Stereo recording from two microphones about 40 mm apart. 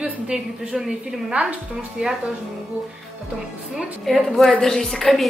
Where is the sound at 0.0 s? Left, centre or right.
Right.